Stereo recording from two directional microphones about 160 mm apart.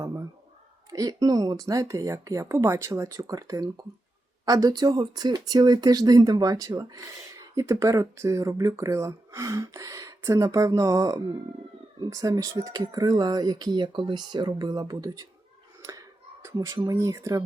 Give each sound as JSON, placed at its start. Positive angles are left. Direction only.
{"t": 0.9, "sound": "speech", "side_deg": -20}
{"t": 15.8, "sound": "a sound", "side_deg": -20}
{"t": 16.6, "sound": "speech", "side_deg": -20}